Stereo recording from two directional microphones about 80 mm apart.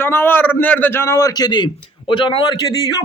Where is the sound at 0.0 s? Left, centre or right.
Left.